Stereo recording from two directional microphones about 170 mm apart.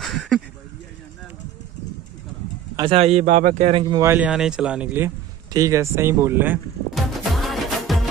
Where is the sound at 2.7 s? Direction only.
30° right (ahead or behind); by 3.7 s 50° right (ahead or behind).